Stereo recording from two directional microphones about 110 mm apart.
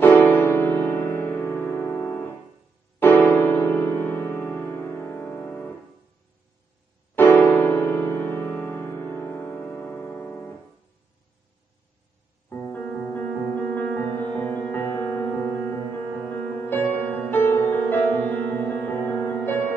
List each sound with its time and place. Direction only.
0.0 s music: 20° left (ahead or behind)
7.2 s music: 15° left (ahead or behind)
12.4 s music: 15° left (ahead or behind)